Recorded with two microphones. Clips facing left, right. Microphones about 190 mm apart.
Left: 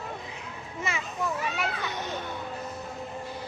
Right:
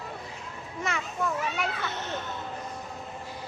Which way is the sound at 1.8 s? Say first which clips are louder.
Even; 15° left (ahead or behind).